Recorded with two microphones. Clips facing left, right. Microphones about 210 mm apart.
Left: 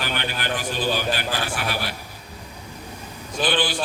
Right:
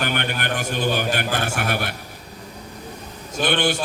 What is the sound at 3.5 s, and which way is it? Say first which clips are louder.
Speech: right 5 dB; 50° right (ahead or behind).